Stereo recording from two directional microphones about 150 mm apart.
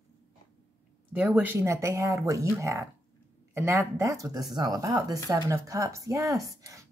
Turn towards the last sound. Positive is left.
turn(degrees=-20)  # may be behind; listen again after turning